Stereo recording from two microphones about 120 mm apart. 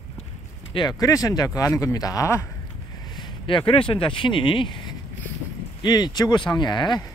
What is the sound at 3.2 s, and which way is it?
Speech, 45° left (ahead or behind).